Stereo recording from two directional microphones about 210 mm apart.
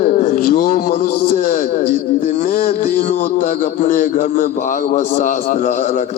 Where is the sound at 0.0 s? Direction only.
40° left (ahead or behind).